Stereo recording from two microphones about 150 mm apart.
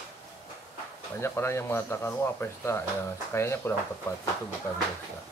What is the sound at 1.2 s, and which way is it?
Speech, 15° left (ahead or behind).